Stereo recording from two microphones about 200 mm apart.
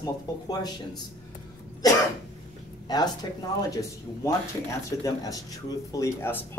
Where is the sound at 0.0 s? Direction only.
20° left (ahead or behind).